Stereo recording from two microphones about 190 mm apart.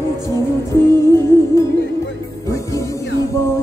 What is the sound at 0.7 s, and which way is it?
Music, 15° left (ahead or behind).